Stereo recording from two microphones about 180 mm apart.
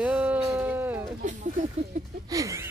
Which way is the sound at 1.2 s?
45° right (ahead or behind).